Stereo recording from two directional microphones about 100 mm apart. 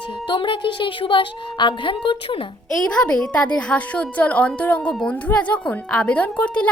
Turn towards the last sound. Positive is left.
turn(degrees=10)  # may be behind; listen again after turning